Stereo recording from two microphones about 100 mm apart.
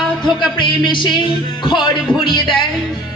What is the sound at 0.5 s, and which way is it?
Speech, 50° left (ahead or behind).